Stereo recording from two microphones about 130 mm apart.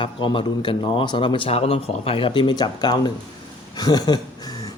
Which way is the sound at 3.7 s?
30° left (ahead or behind).